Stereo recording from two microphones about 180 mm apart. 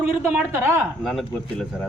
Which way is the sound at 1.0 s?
Centre (ahead or behind).